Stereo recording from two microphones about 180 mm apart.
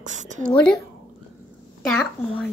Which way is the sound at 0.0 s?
45° right (ahead or behind).